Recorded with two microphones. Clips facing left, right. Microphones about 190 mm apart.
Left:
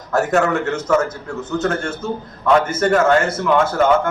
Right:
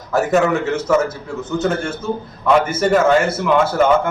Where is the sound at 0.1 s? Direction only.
Centre (ahead or behind).